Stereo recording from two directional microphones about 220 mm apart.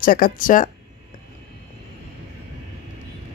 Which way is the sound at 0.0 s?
40° left (ahead or behind).